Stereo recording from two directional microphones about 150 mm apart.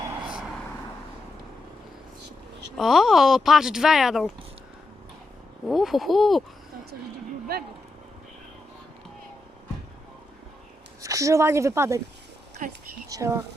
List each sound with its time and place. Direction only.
2.7 s speech: centre (ahead or behind)
5.6 s speech: centre (ahead or behind)
7.5 s speech: 90° right
11.0 s a woman's voice: 20° right (ahead or behind)
13.1 s speech: 20° right (ahead or behind)